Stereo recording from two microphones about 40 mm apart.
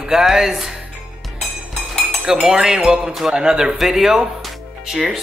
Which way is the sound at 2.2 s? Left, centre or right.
Centre.